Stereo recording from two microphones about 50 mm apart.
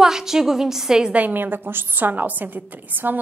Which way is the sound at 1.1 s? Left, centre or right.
Right.